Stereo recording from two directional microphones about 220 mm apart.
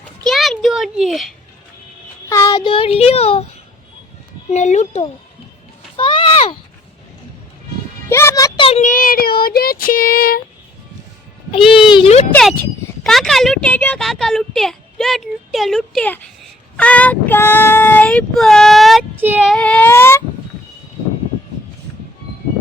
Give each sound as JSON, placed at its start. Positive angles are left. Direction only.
{"t": 0.3, "sound": "a sound", "side_deg": 0}
{"t": 2.3, "sound": "child singing", "side_deg": 15}
{"t": 4.4, "sound": "speech", "side_deg": 30}
{"t": 6.0, "sound": "a sound", "side_deg": 20}
{"t": 8.1, "sound": "speech", "side_deg": 10}
{"t": 11.5, "sound": "child singing", "side_deg": 25}
{"t": 12.3, "sound": "speech", "side_deg": 0}
{"t": 16.7, "sound": "child singing", "side_deg": 5}